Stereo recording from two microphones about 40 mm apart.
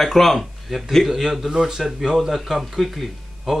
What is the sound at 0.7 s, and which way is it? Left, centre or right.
Speech, centre.